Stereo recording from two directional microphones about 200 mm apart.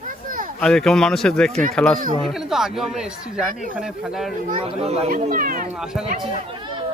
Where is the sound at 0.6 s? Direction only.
5° left (ahead or behind).